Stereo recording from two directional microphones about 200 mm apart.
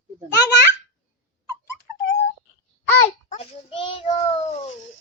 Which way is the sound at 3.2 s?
30° left (ahead or behind).